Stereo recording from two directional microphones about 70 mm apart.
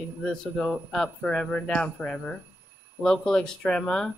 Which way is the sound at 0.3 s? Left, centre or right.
Centre.